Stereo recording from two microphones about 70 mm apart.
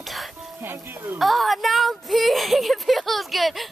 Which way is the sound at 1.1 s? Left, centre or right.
Centre.